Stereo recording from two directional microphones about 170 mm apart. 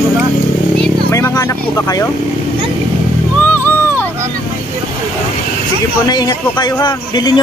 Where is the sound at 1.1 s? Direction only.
15° left (ahead or behind).